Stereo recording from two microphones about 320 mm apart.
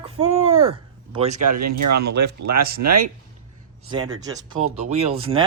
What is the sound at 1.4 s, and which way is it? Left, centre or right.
Speech, right.